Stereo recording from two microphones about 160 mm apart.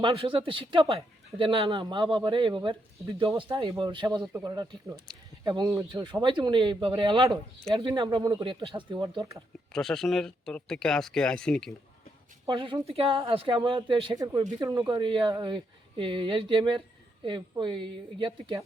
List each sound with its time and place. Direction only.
0.0 s speech: 35° right (ahead or behind)
9.7 s speech: 5° left (ahead or behind)
12.5 s speech: 30° right (ahead or behind)
14.6 s speech: 20° right (ahead or behind)